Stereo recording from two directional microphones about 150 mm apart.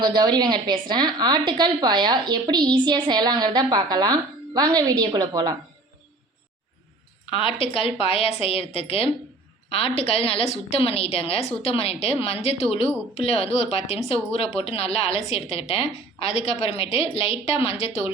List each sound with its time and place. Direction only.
0.0 s speech: 30° right (ahead or behind)
7.3 s a woman's voice: 35° left (ahead or behind)